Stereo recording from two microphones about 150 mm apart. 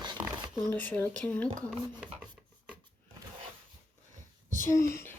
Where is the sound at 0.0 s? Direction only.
30° right (ahead or behind).